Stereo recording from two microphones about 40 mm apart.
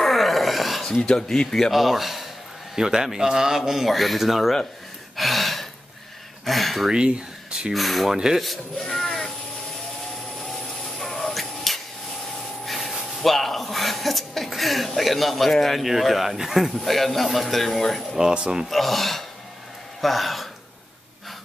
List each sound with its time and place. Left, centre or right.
0.0 s a sound: centre
1.0 s speech: centre
1.7 s a man's voice: centre
3.8 s speech: centre
5.1 s gasp: centre
6.4 s a sound: centre
6.9 s speech: right
7.7 s speech: centre
8.1 s a man's voice: centre
8.7 s speech: centre
11.0 s a sound: centre
12.6 s speech: centre
18.3 s speech: right
18.7 s speech: centre